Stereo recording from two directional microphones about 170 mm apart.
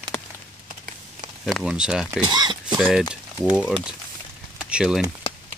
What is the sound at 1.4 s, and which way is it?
Speech, centre (ahead or behind).